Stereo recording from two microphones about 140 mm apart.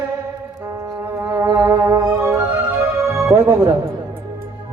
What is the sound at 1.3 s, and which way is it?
Music, 20° right (ahead or behind).